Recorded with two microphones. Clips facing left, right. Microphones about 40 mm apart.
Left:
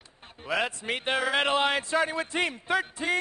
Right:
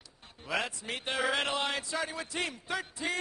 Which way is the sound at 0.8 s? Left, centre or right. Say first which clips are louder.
Left 4 dB; left.